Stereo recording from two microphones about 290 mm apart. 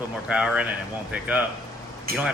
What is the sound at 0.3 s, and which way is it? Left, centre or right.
A man's voice, centre.